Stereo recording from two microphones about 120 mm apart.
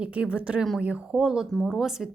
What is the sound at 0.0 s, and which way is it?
A woman's voice, 10° right (ahead or behind).